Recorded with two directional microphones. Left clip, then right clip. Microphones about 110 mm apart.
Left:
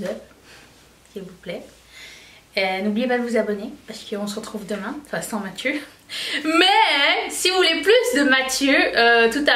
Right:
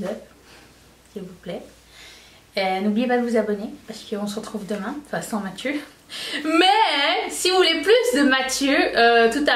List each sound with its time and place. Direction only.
1.4 s speech: 10° left (ahead or behind)